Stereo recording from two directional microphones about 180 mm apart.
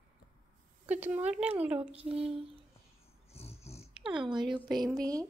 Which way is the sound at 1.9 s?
35° right (ahead or behind).